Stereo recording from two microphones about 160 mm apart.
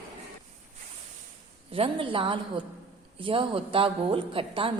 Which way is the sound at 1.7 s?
35° right (ahead or behind).